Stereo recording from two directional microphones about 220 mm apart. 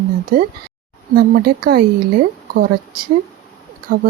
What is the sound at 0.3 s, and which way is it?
Speech, 40° right (ahead or behind).